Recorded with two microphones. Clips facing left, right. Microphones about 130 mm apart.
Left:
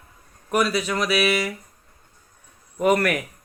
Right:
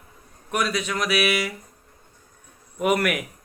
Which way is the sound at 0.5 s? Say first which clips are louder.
Left 3 dB; 5° left (ahead or behind).